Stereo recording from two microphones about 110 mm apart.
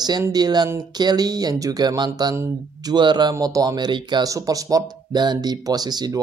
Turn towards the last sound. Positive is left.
turn(degrees=-35)  # may be behind; listen again after turning